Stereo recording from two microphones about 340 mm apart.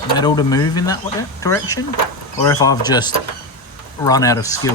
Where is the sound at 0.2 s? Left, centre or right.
Centre.